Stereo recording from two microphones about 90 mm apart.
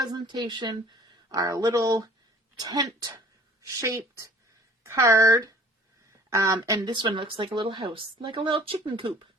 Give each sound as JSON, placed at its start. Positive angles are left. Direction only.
{"t": 0.0, "sound": "speech", "side_deg": -50}
{"t": 1.3, "sound": "a woman's voice", "side_deg": -40}